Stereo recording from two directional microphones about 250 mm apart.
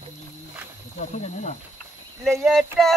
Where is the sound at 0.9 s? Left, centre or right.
Left.